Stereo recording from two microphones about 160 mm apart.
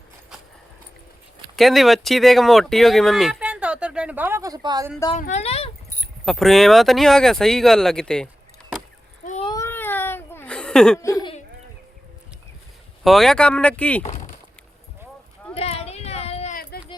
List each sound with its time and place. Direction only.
1.5 s speech: centre (ahead or behind); by 4.9 s 25° right (ahead or behind)
5.1 s speech: 45° left (ahead or behind)
6.2 s speech: centre (ahead or behind)
9.4 s baby cry: 25° left (ahead or behind)
9.6 s a sound: 10° left (ahead or behind)
11.0 s speech: 20° left (ahead or behind)
13.1 s speech: centre (ahead or behind)
15.5 s a sound: 40° left (ahead or behind)